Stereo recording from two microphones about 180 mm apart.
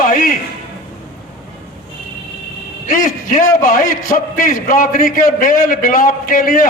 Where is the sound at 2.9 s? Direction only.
50° left (ahead or behind).